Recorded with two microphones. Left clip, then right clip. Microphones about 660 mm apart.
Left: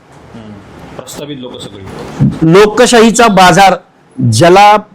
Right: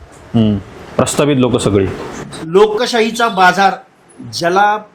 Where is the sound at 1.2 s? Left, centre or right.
Right.